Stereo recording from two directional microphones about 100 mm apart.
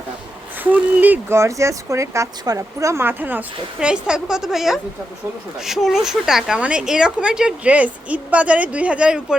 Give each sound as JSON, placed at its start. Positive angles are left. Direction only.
{"t": 0.6, "sound": "speech", "side_deg": -15}